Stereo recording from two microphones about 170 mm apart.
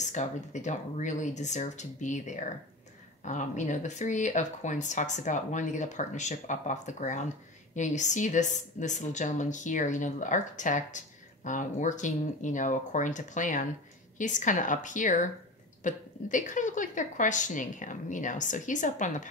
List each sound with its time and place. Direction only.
0.0 s speech: 45° left (ahead or behind)